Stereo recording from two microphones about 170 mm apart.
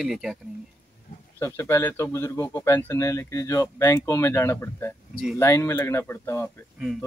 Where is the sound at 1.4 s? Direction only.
15° left (ahead or behind).